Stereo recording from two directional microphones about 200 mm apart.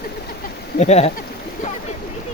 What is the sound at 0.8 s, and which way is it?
Speech, 35° left (ahead or behind).